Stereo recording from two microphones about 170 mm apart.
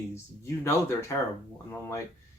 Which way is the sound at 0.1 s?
15° left (ahead or behind).